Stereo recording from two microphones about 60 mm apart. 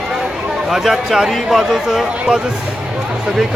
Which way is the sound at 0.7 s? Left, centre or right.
Centre.